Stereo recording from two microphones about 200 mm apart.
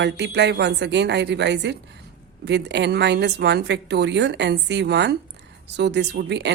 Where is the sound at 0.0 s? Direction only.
60° right (ahead or behind).